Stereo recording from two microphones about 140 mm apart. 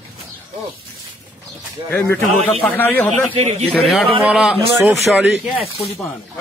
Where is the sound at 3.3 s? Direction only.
50° right (ahead or behind).